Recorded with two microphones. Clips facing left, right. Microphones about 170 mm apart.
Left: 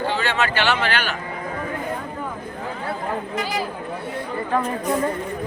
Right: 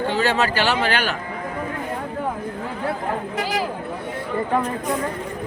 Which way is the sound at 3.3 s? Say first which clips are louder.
Right 2 dB; 90° right.